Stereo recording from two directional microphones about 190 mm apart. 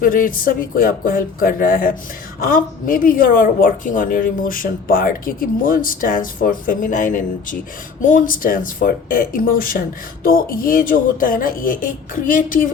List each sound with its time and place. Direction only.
0.0 s a woman's voice: 45° left (ahead or behind)